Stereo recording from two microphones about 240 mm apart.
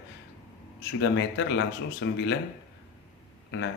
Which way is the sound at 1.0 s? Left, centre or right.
Left.